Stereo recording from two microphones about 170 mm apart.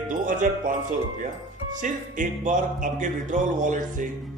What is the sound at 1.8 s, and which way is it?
Music, 50° right (ahead or behind).